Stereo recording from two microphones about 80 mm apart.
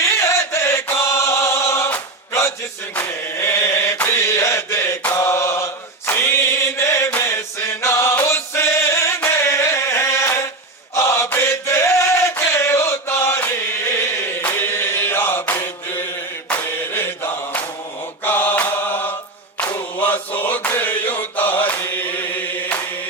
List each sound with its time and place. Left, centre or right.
0.0 s chant: left
3.2 s chant: left
4.0 s mantra: left
7.2 s music: left
10.9 s chant: left
16.5 s mantra: left
19.7 s chant: left